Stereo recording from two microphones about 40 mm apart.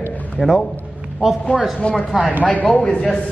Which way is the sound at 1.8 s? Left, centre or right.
Left.